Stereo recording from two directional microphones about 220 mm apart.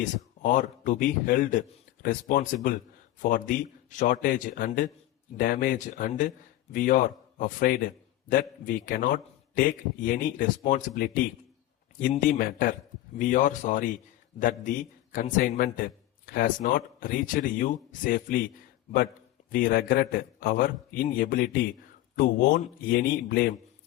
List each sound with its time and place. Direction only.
0.0 s a man's voice: 35° left (ahead or behind)
19.5 s a man's voice: 40° left (ahead or behind)